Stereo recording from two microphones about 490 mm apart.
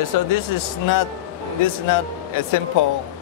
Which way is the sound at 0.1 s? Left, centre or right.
Left.